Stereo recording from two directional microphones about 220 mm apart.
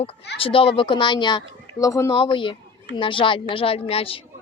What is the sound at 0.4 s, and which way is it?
Speech, 25° left (ahead or behind).